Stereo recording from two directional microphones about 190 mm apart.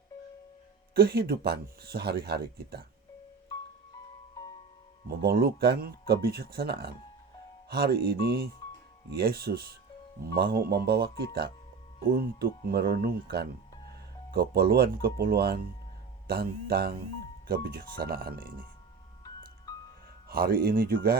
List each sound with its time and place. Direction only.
0.9 s speech: 55° right (ahead or behind)
5.0 s speech: 55° right (ahead or behind)
19.7 s music: 20° left (ahead or behind)
20.2 s speech: 50° right (ahead or behind)